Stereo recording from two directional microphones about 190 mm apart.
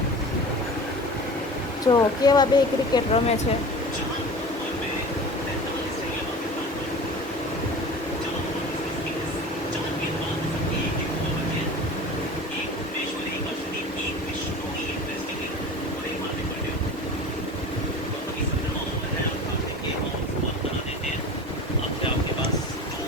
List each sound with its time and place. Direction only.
1.9 s speech: 20° left (ahead or behind)
2.9 s speech: 30° left (ahead or behind)